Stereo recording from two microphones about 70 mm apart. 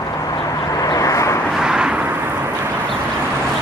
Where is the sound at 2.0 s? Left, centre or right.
Right.